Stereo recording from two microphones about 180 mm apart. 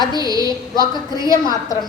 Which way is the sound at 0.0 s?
20° right (ahead or behind).